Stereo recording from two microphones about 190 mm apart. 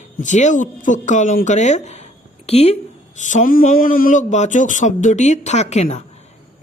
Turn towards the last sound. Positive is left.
turn(degrees=35)  # may be behind; listen again after turning